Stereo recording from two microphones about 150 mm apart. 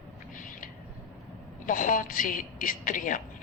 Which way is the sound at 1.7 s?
65° left (ahead or behind).